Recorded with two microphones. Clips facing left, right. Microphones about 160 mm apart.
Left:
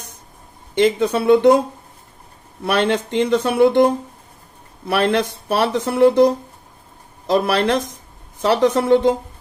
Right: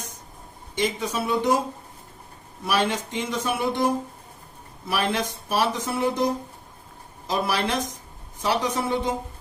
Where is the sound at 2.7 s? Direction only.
60° left (ahead or behind).